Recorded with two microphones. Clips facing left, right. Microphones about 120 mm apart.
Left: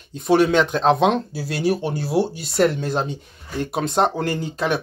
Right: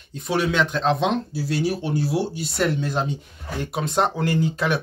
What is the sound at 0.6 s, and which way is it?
Speech, 40° left (ahead or behind).